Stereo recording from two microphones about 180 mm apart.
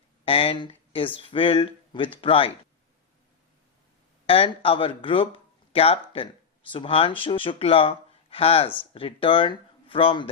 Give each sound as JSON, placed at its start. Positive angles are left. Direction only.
{"t": 0.3, "sound": "speech", "side_deg": 30}
{"t": 4.3, "sound": "speech", "side_deg": 30}